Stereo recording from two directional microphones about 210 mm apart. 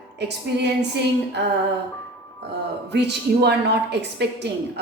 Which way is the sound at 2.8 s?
55° right (ahead or behind).